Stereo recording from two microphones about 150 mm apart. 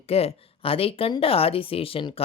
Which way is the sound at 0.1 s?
40° left (ahead or behind).